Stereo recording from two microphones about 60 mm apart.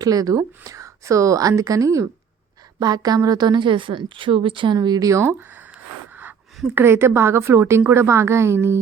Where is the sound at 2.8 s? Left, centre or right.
Right.